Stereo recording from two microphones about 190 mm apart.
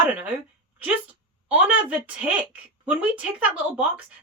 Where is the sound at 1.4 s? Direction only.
10° right (ahead or behind).